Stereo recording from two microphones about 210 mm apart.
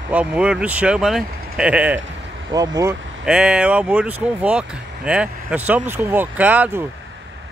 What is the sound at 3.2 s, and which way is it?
Speech, 5° right (ahead or behind).